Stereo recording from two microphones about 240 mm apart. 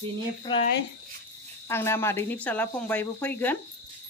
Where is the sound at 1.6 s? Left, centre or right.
Centre.